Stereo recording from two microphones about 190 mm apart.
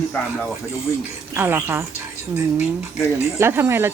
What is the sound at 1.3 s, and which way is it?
Chuckle, 10° right (ahead or behind).